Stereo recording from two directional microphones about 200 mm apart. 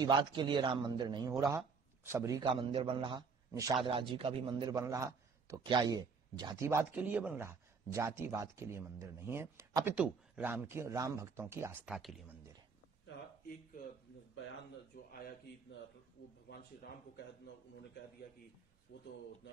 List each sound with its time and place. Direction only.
0.0 s a man's voice: 25° right (ahead or behind); by 12.2 s centre (ahead or behind)